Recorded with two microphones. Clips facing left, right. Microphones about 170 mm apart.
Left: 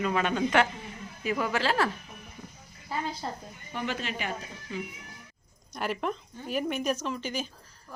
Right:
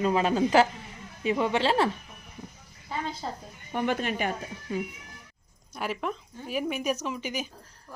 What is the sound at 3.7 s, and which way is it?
Speech, 55° right (ahead or behind).